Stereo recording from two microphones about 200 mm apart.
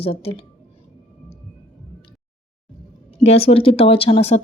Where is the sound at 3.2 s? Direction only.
30° left (ahead or behind).